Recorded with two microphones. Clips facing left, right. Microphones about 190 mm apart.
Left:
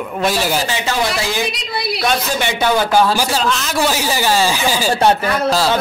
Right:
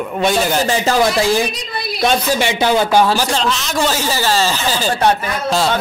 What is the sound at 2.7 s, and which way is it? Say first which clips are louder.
Speech: right 1 dB; 20° right (ahead or behind).